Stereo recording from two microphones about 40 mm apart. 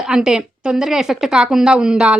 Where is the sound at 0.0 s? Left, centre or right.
Centre.